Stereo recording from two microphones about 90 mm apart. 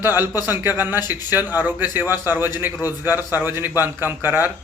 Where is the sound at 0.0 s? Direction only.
25° right (ahead or behind).